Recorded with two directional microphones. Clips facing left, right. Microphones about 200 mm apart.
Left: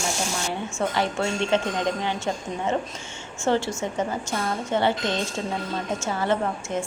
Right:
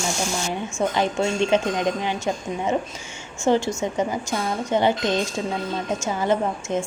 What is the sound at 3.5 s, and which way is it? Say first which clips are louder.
A woman's voice: right 3 dB; 15° right (ahead or behind).